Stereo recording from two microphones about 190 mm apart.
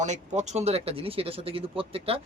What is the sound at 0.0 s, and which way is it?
Speech, 40° right (ahead or behind).